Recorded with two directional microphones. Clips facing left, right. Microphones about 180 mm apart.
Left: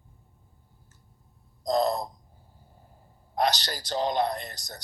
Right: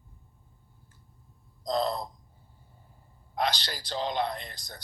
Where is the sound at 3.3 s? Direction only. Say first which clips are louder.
Left 4 dB; 40° left (ahead or behind).